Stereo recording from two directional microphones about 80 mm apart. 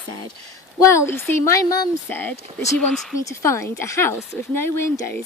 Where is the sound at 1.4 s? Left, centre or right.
Left.